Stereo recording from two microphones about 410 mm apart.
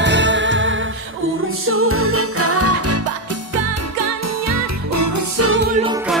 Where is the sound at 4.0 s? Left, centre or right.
Right.